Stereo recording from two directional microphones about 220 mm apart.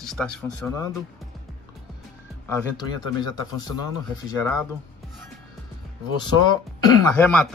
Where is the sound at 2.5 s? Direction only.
10° left (ahead or behind).